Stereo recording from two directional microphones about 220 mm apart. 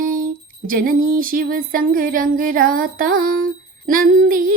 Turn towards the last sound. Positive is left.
turn(degrees=-40)  # may be behind; listen again after turning